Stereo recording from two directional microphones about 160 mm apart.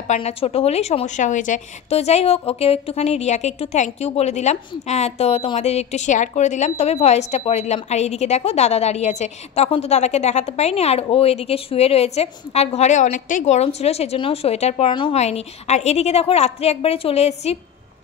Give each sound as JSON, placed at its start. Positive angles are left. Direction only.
{"t": 0.1, "sound": "a woman's voice", "side_deg": 40}
{"t": 15.1, "sound": "a woman's voice", "side_deg": 45}